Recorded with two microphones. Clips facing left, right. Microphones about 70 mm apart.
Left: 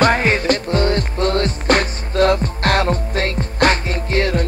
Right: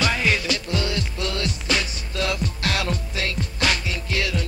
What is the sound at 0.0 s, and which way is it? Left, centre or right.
Music, left.